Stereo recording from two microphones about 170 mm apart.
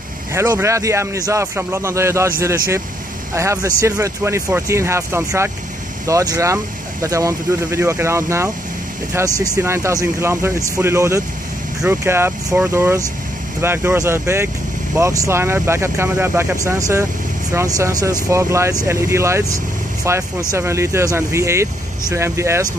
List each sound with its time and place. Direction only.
0.3 s speech: 15° right (ahead or behind)
3.3 s speech: 15° right (ahead or behind)